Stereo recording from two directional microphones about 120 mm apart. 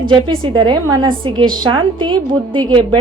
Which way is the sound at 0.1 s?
40° right (ahead or behind).